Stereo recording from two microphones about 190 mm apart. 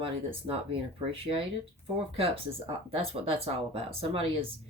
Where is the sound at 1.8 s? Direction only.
30° right (ahead or behind).